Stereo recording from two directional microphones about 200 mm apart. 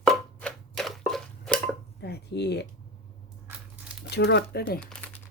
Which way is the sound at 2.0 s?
55° left (ahead or behind).